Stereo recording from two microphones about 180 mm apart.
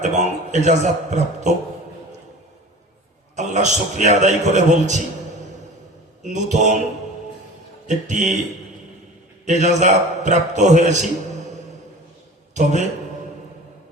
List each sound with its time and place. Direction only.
0.0 s a man's voice: 40° right (ahead or behind)
3.3 s a man's voice: 40° right (ahead or behind)
6.2 s a man's voice: 40° right (ahead or behind)
7.9 s a man's voice: 40° right (ahead or behind)
9.5 s a man's voice: 40° right (ahead or behind)
12.5 s a man's voice: 40° right (ahead or behind)